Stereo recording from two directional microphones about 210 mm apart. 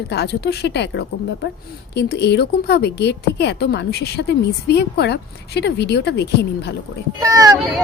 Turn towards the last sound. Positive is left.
turn(degrees=-15)  # may be behind; listen again after turning